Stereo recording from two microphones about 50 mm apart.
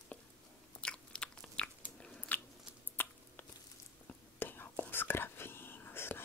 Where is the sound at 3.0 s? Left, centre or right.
Left.